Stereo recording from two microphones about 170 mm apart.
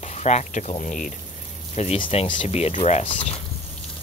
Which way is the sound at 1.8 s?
35° left (ahead or behind).